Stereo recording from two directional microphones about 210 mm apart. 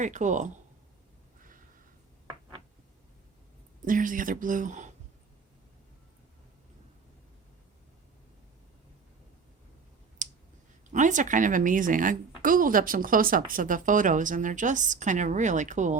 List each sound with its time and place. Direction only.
0.0 s a woman's voice: 35° right (ahead or behind)
3.8 s a woman's voice: 40° right (ahead or behind)
10.2 s clicking: 35° right (ahead or behind)
10.9 s a woman's voice: 35° right (ahead or behind)